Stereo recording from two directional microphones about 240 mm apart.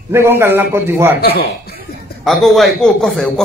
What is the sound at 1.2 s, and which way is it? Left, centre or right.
Speech, left.